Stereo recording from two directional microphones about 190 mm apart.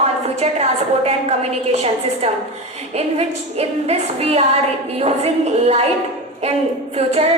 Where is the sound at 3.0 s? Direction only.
35° right (ahead or behind).